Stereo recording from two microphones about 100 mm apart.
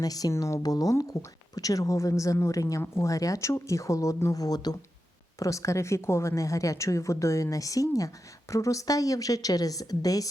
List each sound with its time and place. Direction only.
0.0 s a woman's voice: 40° left (ahead or behind)